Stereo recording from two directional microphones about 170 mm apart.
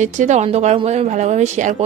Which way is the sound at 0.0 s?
45° right (ahead or behind).